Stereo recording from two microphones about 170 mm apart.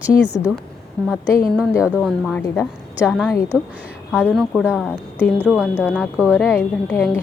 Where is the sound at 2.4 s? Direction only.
15° left (ahead or behind).